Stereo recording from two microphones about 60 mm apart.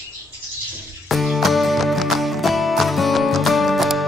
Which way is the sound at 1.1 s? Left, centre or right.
Centre.